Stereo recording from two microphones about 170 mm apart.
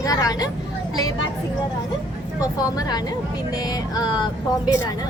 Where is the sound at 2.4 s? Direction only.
20° left (ahead or behind).